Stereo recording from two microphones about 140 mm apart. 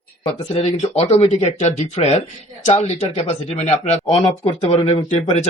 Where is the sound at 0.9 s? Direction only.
45° left (ahead or behind).